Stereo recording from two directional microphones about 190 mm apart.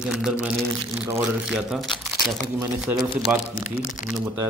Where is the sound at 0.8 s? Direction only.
15° right (ahead or behind).